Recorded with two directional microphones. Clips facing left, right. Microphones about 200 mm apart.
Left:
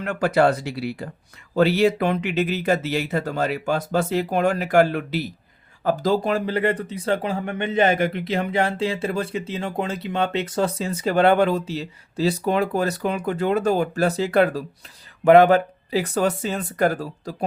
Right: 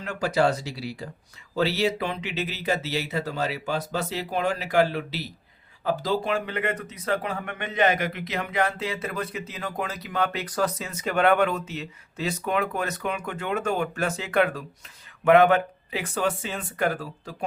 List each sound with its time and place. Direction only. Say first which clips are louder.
0.0 s speech: left 5 dB; 60° left (ahead or behind); by 17.3 s 40° left (ahead or behind)